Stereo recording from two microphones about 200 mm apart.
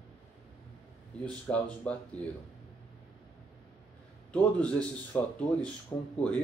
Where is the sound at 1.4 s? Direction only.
5° left (ahead or behind).